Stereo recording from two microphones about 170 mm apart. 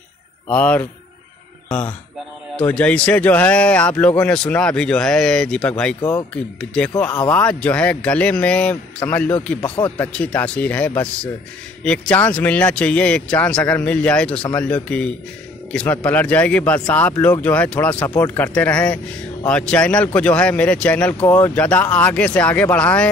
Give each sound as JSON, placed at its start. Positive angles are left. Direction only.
{"t": 0.5, "sound": "speech", "side_deg": 10}
{"t": 5.9, "sound": "speech", "side_deg": 20}
{"t": 6.6, "sound": "speech", "side_deg": 5}
{"t": 9.6, "sound": "speech", "side_deg": 25}
{"t": 9.9, "sound": "speech", "side_deg": 5}